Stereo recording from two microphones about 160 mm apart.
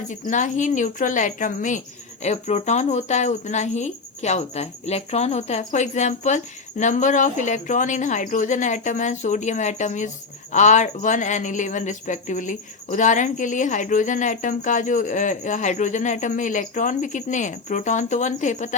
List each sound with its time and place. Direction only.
0.1 s speech: 50° left (ahead or behind)